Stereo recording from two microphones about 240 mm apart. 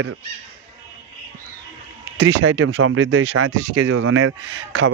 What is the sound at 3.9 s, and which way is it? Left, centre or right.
Speech, right.